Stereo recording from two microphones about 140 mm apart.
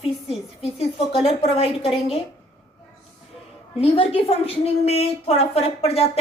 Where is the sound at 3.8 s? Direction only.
45° left (ahead or behind).